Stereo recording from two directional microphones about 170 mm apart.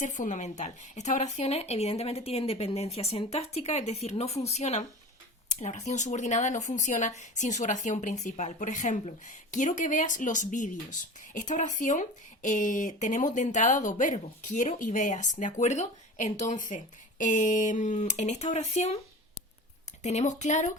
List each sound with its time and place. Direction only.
0.0 s speech: 45° left (ahead or behind)
20.0 s speech: 45° left (ahead or behind)